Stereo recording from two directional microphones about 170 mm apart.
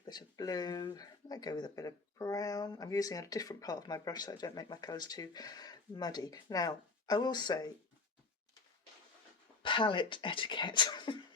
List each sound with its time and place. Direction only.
0.0 s speech: 25° left (ahead or behind)
9.6 s speech: 30° left (ahead or behind)